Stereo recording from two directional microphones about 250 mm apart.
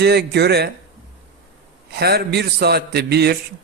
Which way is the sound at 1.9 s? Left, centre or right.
Right.